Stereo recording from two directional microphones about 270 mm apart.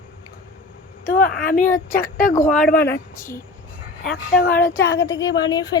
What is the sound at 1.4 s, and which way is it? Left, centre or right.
Speech, left.